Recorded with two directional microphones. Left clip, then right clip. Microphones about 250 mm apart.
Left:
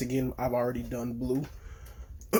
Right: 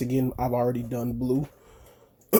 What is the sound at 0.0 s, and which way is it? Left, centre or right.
Speech, right.